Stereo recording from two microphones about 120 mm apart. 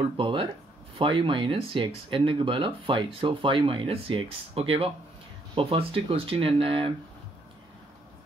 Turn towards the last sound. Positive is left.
turn(degrees=-45)  # may be behind; listen again after turning